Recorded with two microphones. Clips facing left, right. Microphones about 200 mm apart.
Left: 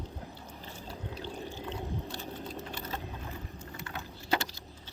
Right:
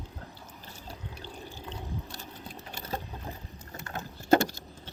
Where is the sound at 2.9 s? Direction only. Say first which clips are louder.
Right 6 dB; 40° right (ahead or behind).